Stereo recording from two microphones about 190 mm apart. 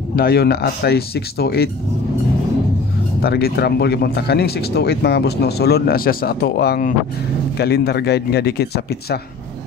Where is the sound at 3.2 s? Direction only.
55° left (ahead or behind).